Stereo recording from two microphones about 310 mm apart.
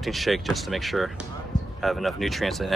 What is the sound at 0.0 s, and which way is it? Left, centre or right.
Speech, centre.